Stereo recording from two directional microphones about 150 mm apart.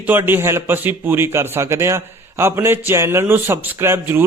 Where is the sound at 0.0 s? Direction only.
15° right (ahead or behind).